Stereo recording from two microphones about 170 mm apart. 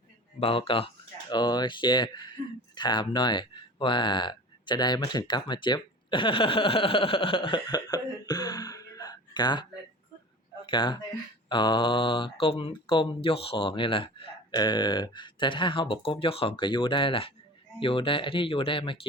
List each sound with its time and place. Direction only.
0.3 s speech: 35° left (ahead or behind)
10.7 s speech: 25° left (ahead or behind)